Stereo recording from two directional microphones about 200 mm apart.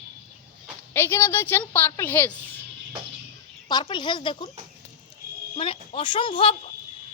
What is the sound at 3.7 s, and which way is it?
Speech, 20° left (ahead or behind).